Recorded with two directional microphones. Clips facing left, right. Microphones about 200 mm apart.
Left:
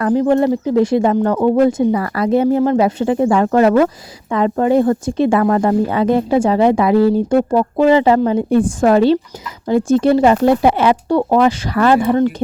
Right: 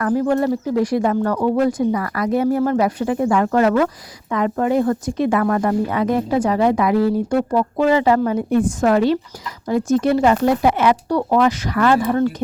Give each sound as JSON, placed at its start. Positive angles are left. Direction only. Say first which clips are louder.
{"t": 0.0, "sound": "speech", "louder": "left 4 dB", "side_deg": 20}